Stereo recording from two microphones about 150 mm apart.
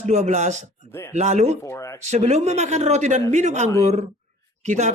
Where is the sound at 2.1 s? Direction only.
45° right (ahead or behind).